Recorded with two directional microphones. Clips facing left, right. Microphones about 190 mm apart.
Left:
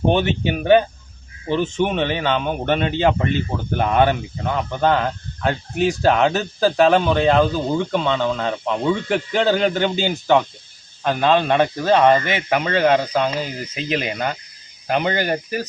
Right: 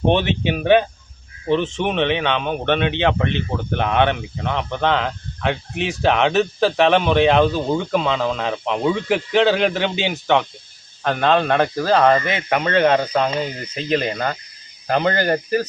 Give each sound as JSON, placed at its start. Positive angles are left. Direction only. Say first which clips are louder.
{"t": 0.1, "sound": "speech", "louder": "right 2 dB", "side_deg": 0}